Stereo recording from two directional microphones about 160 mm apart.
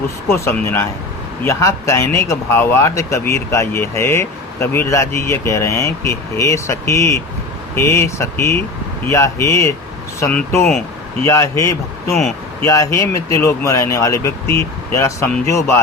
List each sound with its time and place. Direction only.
0.3 s speech: 15° left (ahead or behind)